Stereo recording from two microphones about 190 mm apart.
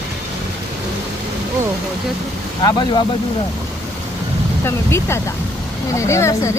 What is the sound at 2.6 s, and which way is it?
Speech, 25° left (ahead or behind).